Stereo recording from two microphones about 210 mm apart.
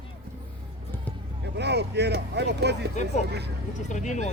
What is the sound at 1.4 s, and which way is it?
Speech, 55° right (ahead or behind).